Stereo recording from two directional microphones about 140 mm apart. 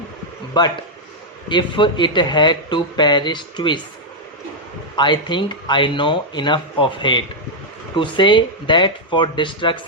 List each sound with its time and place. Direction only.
0.6 s speech: 30° left (ahead or behind)
4.9 s speech: 35° left (ahead or behind)